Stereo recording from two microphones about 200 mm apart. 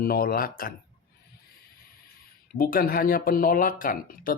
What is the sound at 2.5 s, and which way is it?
Speech, 45° left (ahead or behind).